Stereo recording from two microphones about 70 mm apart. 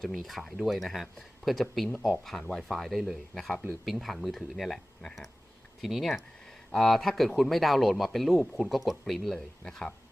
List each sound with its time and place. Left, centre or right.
0.0 s speech: centre
3.5 s speech: centre
3.8 s speech: centre